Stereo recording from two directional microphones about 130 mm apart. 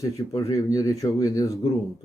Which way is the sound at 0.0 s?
25° left (ahead or behind).